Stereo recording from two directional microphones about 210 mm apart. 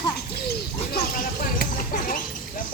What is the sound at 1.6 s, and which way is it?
Speech, 40° left (ahead or behind).